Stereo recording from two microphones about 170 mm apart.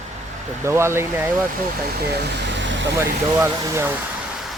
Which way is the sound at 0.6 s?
15° right (ahead or behind).